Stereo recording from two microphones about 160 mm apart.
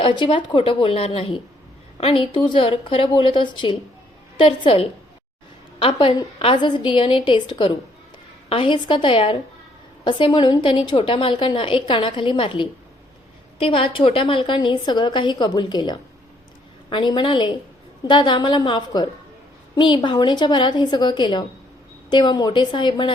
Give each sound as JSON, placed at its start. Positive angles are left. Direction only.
{"t": 0.2, "sound": "a woman's voice", "side_deg": 30}